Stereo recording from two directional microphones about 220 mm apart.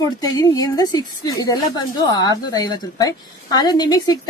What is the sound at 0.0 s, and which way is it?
A woman's voice, 15° left (ahead or behind).